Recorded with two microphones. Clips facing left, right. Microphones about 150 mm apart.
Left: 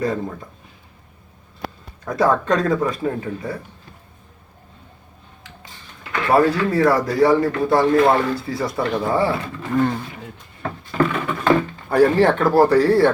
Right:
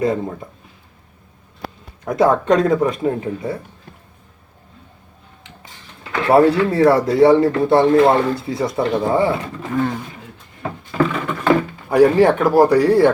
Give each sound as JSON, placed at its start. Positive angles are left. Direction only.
{"t": 0.0, "sound": "speech", "side_deg": -20}
{"t": 2.0, "sound": "speech", "side_deg": -20}
{"t": 6.0, "sound": "speech", "side_deg": -25}
{"t": 9.7, "sound": "speech", "side_deg": 0}
{"t": 10.6, "sound": "a sound", "side_deg": -5}
{"t": 11.4, "sound": "speech", "side_deg": -10}